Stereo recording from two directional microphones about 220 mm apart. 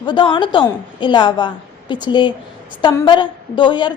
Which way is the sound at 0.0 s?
20° left (ahead or behind).